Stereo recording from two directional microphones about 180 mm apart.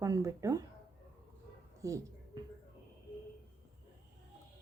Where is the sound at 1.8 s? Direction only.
15° right (ahead or behind).